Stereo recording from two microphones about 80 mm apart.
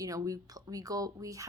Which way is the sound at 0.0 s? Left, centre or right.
Right.